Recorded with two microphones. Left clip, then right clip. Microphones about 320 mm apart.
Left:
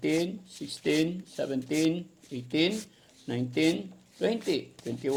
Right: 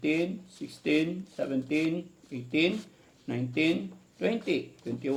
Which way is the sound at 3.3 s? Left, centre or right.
Left.